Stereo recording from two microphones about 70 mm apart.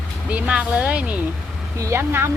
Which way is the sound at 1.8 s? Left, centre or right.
Right.